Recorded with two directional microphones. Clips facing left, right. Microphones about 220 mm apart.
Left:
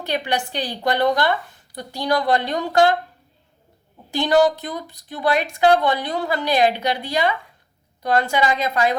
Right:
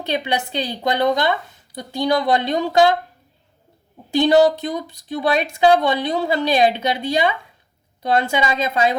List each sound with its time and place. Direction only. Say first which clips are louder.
0.0 s a woman's voice: right 1 dB; 25° right (ahead or behind)
4.2 s a woman's voice: right 3 dB; 20° right (ahead or behind)